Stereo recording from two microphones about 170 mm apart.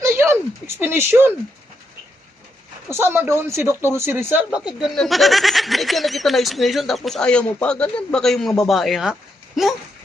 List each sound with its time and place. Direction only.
0.0 s a sound: 15° right (ahead or behind)
0.8 s speech: 15° right (ahead or behind)
2.9 s speech: 15° right (ahead or behind)